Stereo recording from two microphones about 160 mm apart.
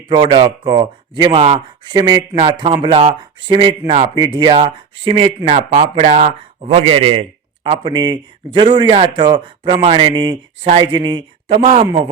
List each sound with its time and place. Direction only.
0.1 s a man's voice: 30° right (ahead or behind)
5.5 s speech: 50° right (ahead or behind)
6.6 s a man's voice: 35° right (ahead or behind)